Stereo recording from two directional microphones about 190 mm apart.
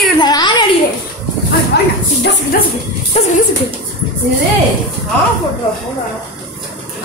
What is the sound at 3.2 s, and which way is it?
Speech, 35° left (ahead or behind).